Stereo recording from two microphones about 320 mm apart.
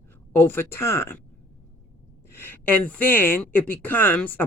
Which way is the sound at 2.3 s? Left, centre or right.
Centre.